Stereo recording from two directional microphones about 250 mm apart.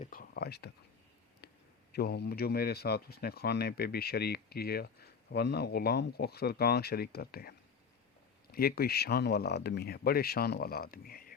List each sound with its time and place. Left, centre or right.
0.0 s speech: left
1.9 s speech: left
8.5 s speech: left